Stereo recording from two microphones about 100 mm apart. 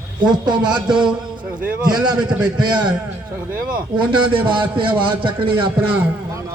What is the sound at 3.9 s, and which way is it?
A man's voice, 55° right (ahead or behind).